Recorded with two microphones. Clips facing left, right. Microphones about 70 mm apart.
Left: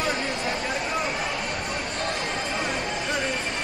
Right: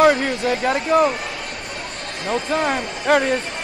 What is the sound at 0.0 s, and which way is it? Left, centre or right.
Speech, right.